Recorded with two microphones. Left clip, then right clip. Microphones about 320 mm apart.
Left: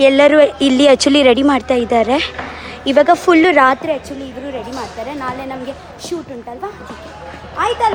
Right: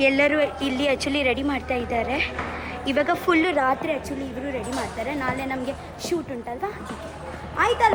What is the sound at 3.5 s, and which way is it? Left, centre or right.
Speech, left.